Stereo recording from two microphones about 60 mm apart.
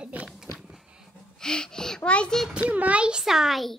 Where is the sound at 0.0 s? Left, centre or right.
Right.